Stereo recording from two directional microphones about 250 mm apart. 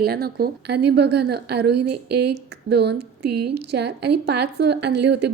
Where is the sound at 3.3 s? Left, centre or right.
Right.